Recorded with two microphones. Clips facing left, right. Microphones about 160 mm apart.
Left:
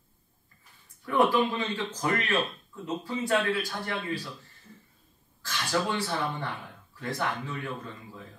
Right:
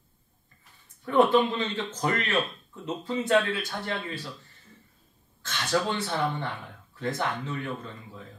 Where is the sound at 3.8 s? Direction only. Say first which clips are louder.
Even; 25° right (ahead or behind).